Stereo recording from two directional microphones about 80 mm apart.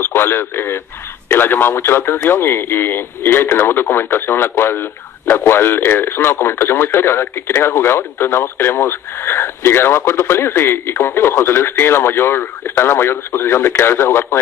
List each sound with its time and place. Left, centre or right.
0.0 s speech: left